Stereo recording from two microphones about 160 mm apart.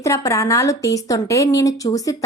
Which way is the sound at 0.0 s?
20° left (ahead or behind).